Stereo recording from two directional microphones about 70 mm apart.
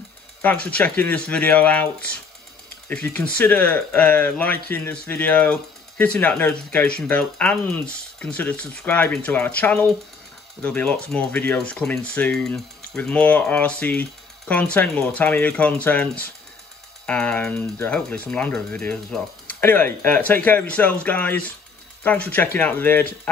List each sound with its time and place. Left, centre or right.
0.4 s speech: left
19.4 s speech: left